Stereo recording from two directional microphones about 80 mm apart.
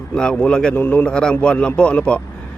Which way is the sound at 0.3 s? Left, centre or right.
Centre.